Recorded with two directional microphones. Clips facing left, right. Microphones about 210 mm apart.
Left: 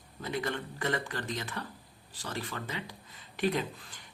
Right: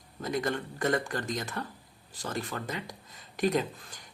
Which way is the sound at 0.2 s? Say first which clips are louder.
Right 3 dB; 45° right (ahead or behind).